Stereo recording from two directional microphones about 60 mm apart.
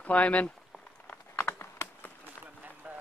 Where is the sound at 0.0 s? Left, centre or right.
Left.